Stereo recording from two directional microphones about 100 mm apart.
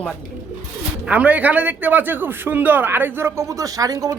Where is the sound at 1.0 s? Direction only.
15° right (ahead or behind).